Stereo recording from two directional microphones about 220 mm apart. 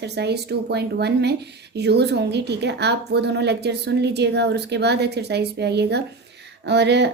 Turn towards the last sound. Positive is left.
turn(degrees=-50)  # may be behind; listen again after turning